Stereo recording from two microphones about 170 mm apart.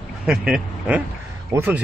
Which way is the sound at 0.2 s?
5° right (ahead or behind).